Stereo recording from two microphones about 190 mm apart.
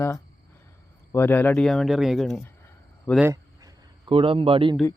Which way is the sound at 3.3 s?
20° right (ahead or behind).